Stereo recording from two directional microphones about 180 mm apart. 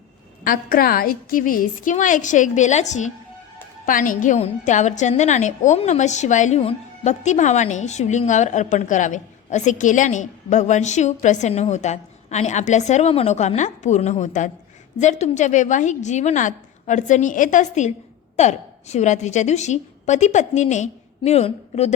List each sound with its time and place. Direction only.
0.4 s a woman's voice: 50° left (ahead or behind); by 21.9 s 35° left (ahead or behind)